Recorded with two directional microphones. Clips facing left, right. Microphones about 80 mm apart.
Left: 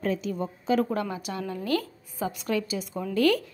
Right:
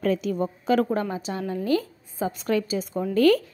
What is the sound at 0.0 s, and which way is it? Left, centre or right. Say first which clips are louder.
Speech: right 4 dB; right.